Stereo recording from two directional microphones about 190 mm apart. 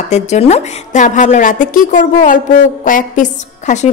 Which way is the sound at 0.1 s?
35° left (ahead or behind).